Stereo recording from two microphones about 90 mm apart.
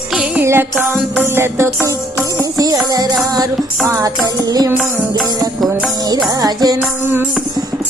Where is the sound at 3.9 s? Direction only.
40° right (ahead or behind).